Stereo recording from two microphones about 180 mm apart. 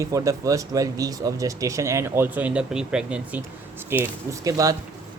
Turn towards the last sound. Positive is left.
turn(degrees=-20)  # may be behind; listen again after turning